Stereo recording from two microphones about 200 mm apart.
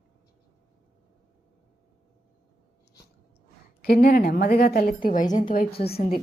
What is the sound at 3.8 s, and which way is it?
A woman's voice, 50° left (ahead or behind).